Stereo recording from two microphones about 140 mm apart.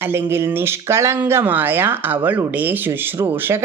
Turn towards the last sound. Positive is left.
turn(degrees=-15)  # may be behind; listen again after turning